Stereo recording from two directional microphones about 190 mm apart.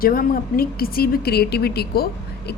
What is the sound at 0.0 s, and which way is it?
A woman's voice, 50° left (ahead or behind).